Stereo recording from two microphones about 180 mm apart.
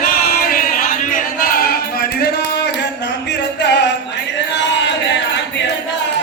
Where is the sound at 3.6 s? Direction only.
75° left (ahead or behind).